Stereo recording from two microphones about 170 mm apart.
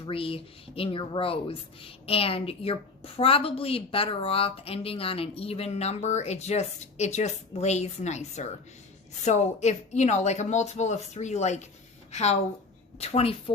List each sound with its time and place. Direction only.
0.0 s speech: 30° left (ahead or behind)